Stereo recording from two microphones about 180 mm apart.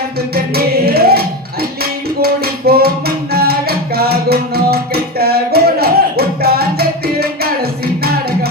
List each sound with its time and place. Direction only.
0.3 s music: 60° right (ahead or behind)